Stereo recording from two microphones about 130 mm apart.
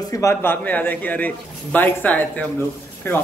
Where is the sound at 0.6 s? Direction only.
15° left (ahead or behind).